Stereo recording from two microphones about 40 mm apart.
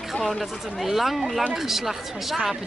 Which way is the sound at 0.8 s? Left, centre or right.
Centre.